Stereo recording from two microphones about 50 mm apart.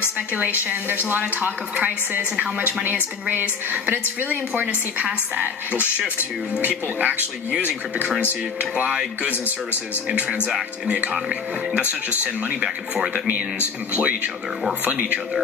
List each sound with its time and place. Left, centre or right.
0.2 s speech: right
6.6 s speech: right
10.8 s speech: right
12.5 s speech: centre
13.9 s speech: right